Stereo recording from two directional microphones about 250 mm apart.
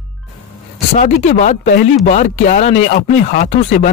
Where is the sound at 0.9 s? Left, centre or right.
Left.